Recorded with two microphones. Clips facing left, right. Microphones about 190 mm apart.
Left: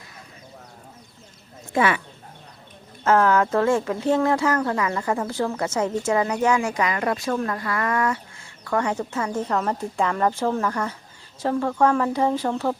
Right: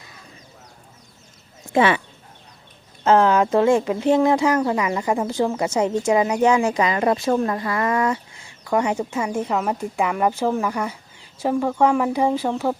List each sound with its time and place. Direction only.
1.7 s speech: 25° right (ahead or behind)
3.0 s a woman's voice: 20° right (ahead or behind)